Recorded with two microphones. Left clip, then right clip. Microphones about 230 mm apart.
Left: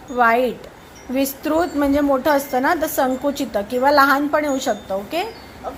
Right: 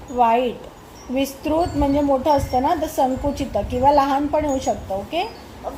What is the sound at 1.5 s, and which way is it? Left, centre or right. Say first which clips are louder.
A woman's voice: left 1 dB; left.